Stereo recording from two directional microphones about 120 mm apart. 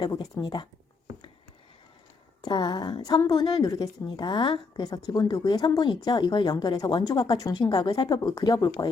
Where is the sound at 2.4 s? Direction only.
35° left (ahead or behind).